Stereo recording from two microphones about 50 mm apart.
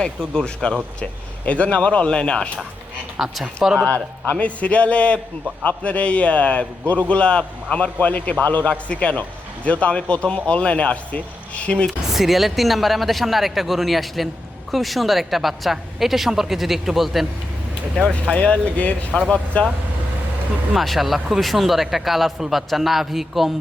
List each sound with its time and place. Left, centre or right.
0.0 s speech: centre
3.2 s a woman's voice: centre
3.8 s speech: left
12.0 s a woman's voice: centre
18.1 s speech: left
20.7 s a woman's voice: centre